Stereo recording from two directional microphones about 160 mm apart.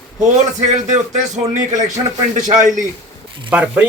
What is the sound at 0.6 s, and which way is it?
A man's voice, 45° right (ahead or behind).